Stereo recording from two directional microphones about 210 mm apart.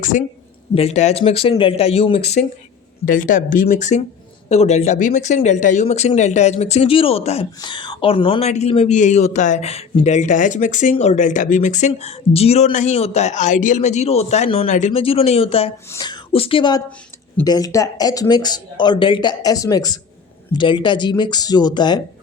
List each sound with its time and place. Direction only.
0.0 s speech: 35° left (ahead or behind); by 22.0 s 20° left (ahead or behind)